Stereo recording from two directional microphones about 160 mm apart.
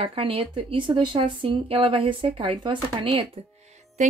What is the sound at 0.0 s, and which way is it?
Speech, 35° right (ahead or behind).